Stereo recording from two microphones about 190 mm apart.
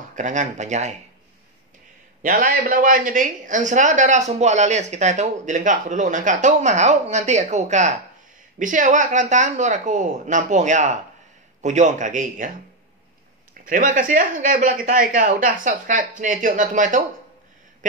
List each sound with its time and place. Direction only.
0.1 s speech: 40° right (ahead or behind)
2.2 s speech: 45° right (ahead or behind)
13.7 s speech: 45° right (ahead or behind)